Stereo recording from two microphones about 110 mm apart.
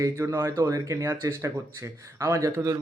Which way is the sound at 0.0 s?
25° right (ahead or behind).